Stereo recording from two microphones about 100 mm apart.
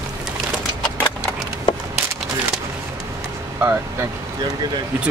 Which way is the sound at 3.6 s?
25° right (ahead or behind).